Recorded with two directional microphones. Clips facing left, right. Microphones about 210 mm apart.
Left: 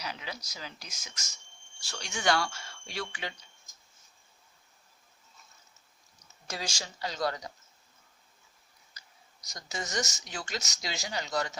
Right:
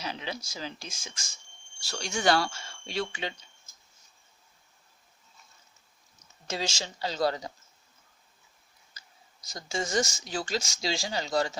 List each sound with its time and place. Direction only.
0.0 s speech: 25° right (ahead or behind)
6.5 s speech: 25° right (ahead or behind)
9.0 s speech: 30° right (ahead or behind)